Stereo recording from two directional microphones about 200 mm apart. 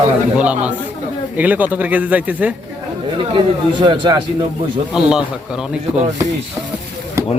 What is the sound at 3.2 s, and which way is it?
Speech, 25° right (ahead or behind).